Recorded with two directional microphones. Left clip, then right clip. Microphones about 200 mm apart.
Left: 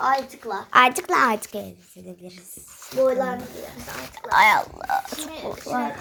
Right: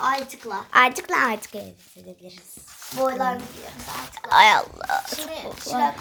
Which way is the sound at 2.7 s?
20° right (ahead or behind).